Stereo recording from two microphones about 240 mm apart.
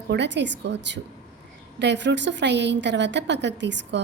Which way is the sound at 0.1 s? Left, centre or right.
Right.